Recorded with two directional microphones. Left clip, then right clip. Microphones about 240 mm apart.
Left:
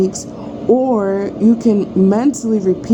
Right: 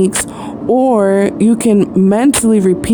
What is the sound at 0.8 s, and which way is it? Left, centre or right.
Speech, right.